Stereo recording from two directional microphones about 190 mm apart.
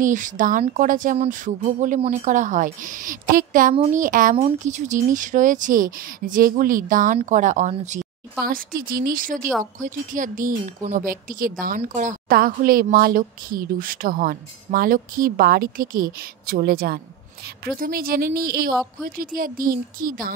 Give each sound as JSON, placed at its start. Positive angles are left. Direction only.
{"t": 0.0, "sound": "a woman's voice", "side_deg": -45}